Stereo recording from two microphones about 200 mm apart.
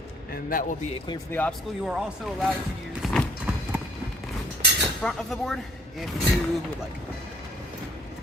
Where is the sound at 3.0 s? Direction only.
Centre (ahead or behind).